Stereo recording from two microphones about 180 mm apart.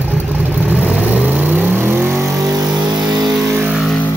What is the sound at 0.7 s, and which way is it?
Vehicle, 10° right (ahead or behind).